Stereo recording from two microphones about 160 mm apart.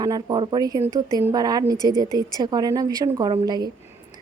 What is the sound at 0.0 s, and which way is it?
A woman's voice, 25° right (ahead or behind).